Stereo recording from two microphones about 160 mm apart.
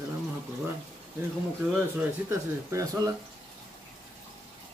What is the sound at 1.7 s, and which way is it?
Speech, 15° right (ahead or behind).